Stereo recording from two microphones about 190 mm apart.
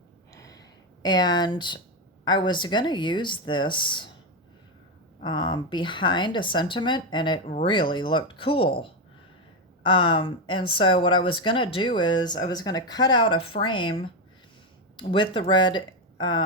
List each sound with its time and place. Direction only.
0.3 s gasp: 15° left (ahead or behind)
1.0 s a woman's voice: 20° left (ahead or behind)
5.2 s a woman's voice: 25° left (ahead or behind)